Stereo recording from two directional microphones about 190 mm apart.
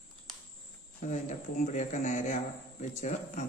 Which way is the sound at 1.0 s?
40° left (ahead or behind).